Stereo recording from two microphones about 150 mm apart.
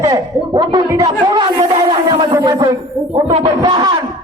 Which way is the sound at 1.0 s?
35° right (ahead or behind).